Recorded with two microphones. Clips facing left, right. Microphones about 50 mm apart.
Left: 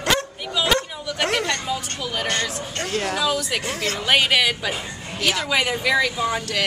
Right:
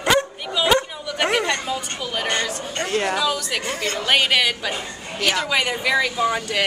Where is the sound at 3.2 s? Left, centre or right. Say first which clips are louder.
Even; centre.